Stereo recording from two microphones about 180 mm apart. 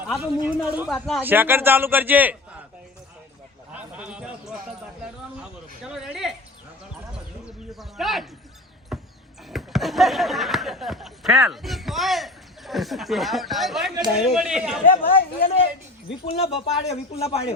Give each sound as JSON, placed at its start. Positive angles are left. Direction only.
{"t": 0.2, "sound": "a man's voice", "side_deg": -10}
{"t": 0.9, "sound": "speech", "side_deg": 0}
{"t": 1.2, "sound": "a man's voice", "side_deg": -10}
{"t": 3.7, "sound": "a sound", "side_deg": -5}
{"t": 5.4, "sound": "speech", "side_deg": -5}
{"t": 7.4, "sound": "speech", "side_deg": 0}
{"t": 8.9, "sound": "a sound", "side_deg": 0}
{"t": 9.5, "sound": "speech", "side_deg": 0}
{"t": 14.8, "sound": "speech", "side_deg": 55}
{"t": 16.2, "sound": "speech", "side_deg": 35}